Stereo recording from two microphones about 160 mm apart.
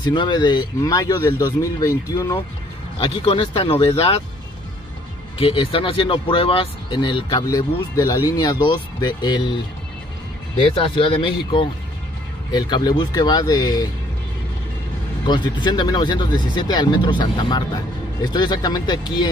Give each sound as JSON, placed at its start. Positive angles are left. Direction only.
{"t": 0.0, "sound": "speech", "side_deg": 30}
{"t": 3.0, "sound": "speech", "side_deg": 30}
{"t": 5.4, "sound": "speech", "side_deg": 35}
{"t": 7.4, "sound": "speech", "side_deg": 20}
{"t": 10.7, "sound": "speech", "side_deg": 35}
{"t": 15.2, "sound": "speech", "side_deg": 30}